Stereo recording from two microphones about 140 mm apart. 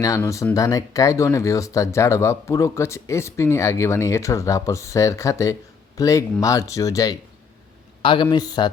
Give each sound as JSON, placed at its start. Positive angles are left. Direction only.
{"t": 0.5, "sound": "speech", "side_deg": 25}
{"t": 8.0, "sound": "a man's voice", "side_deg": 35}